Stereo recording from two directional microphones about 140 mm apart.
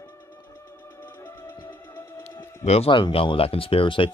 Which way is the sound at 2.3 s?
20° left (ahead or behind).